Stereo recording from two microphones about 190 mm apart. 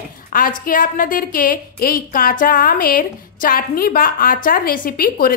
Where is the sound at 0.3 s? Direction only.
45° left (ahead or behind).